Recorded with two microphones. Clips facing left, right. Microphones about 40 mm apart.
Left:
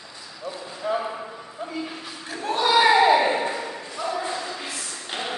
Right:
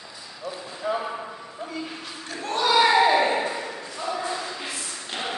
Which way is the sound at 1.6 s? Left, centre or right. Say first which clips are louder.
Left 2 dB; centre.